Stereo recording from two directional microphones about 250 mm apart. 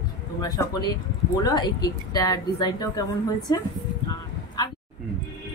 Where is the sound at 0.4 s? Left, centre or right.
Centre.